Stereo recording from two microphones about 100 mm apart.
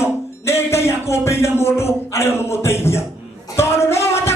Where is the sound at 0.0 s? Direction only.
25° left (ahead or behind).